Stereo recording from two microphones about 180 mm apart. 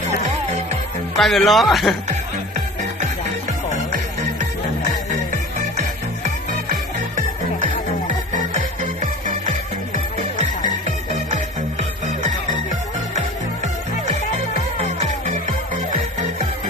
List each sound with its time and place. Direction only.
1.1 s speech: centre (ahead or behind)
8.8 s music: 45° right (ahead or behind)